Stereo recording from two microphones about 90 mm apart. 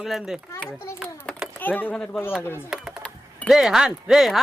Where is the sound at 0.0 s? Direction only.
Centre (ahead or behind).